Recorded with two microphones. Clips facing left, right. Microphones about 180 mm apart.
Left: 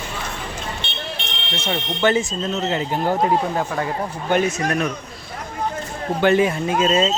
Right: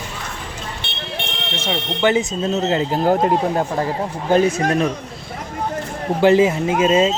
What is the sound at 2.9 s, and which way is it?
Speech, 35° right (ahead or behind).